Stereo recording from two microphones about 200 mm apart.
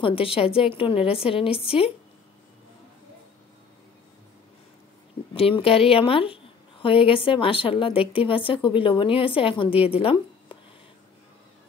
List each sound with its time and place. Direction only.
0.0 s a woman's voice: 25° left (ahead or behind)
5.3 s a woman's voice: 30° left (ahead or behind)